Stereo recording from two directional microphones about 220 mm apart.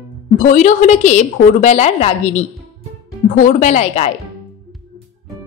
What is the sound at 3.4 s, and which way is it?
Speech, 35° left (ahead or behind).